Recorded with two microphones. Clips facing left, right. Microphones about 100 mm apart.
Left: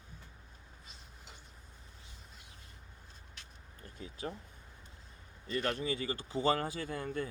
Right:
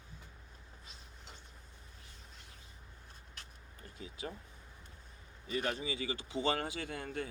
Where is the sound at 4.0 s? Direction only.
40° left (ahead or behind).